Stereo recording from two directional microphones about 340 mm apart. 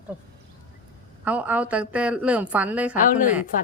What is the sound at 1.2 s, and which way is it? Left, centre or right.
A woman's voice, centre.